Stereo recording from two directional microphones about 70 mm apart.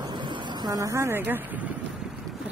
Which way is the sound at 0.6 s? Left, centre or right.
Right.